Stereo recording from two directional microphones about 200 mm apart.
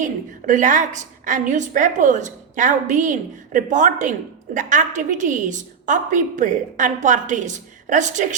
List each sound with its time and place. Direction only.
0.0 s a woman's voice: 40° right (ahead or behind)